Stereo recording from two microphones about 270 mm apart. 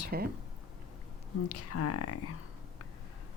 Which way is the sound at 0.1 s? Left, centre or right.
Right.